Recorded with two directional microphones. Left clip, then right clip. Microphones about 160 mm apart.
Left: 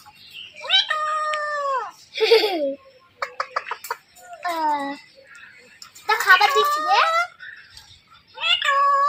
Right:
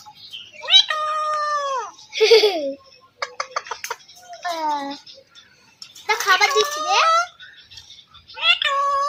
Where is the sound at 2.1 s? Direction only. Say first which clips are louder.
Right 3 dB; 20° right (ahead or behind).